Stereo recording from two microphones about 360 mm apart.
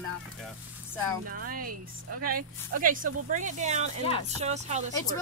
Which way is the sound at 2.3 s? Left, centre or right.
Right.